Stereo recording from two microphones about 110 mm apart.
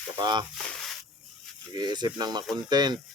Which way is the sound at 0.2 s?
40° right (ahead or behind).